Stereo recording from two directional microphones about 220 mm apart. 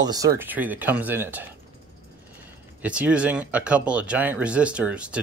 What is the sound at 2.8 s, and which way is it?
Speech, 5° right (ahead or behind).